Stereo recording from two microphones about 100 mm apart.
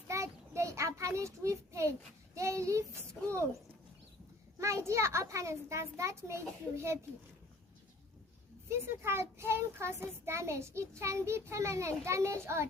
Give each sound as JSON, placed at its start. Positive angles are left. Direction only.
{"t": 0.1, "sound": "child singing", "side_deg": -30}
{"t": 2.3, "sound": "a child's voice", "side_deg": -30}
{"t": 4.6, "sound": "a child's voice", "side_deg": -30}
{"t": 8.9, "sound": "a child's voice", "side_deg": -25}